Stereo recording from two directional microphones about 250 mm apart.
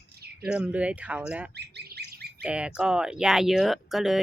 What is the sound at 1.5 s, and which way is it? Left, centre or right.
Squawk, right.